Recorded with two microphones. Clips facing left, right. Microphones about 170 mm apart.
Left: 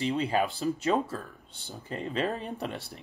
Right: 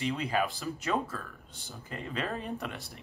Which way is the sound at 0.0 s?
30° left (ahead or behind).